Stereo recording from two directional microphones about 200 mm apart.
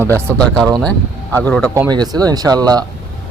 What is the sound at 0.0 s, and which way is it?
Speech, 10° right (ahead or behind).